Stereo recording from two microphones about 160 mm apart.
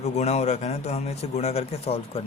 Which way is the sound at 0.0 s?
45° left (ahead or behind).